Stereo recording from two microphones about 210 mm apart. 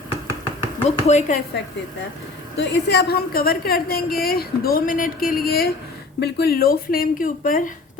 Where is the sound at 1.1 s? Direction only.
35° left (ahead or behind).